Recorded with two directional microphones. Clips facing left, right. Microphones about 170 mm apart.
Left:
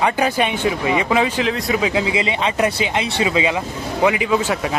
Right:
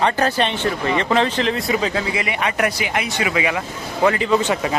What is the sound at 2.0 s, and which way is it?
Speech, 20° left (ahead or behind).